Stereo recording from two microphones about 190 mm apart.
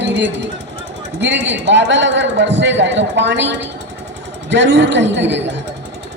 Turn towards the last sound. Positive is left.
turn(degrees=-70)  # may be behind; listen again after turning